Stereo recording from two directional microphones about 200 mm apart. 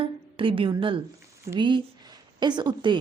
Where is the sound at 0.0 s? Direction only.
25° right (ahead or behind).